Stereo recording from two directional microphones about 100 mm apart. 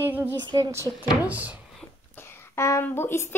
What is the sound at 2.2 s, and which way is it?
Speech, 25° left (ahead or behind).